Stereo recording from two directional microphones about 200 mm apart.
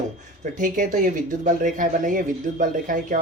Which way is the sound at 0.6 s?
40° right (ahead or behind).